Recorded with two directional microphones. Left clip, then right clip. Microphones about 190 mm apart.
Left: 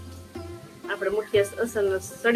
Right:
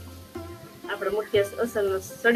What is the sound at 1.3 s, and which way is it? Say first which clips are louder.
Speech: even; 20° left (ahead or behind).